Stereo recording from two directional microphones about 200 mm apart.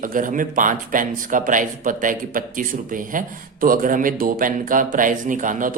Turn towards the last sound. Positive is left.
turn(degrees=-40)  # may be behind; listen again after turning